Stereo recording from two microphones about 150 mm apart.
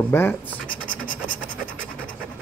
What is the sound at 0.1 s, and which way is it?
Speech, 15° left (ahead or behind).